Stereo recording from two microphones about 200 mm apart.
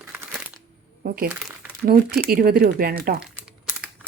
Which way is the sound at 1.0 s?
45° right (ahead or behind).